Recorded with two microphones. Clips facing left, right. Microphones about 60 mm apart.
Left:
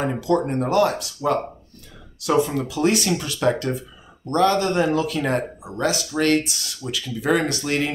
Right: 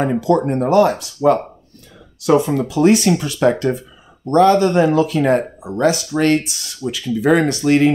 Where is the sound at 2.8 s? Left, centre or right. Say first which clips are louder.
Right 7 dB; right.